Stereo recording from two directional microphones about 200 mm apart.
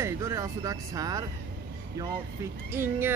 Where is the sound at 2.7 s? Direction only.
10° right (ahead or behind).